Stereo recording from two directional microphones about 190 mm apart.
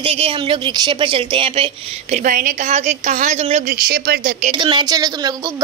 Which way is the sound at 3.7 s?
50° right (ahead or behind).